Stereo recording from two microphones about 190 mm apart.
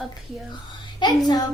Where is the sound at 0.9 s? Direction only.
20° left (ahead or behind).